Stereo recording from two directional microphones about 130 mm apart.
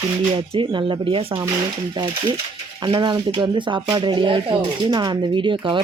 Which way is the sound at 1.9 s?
35° right (ahead or behind).